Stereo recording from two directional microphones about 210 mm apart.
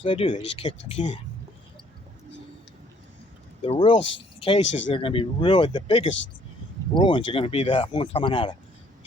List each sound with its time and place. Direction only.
0.0 s speech: 25° left (ahead or behind)
3.6 s speech: 25° left (ahead or behind)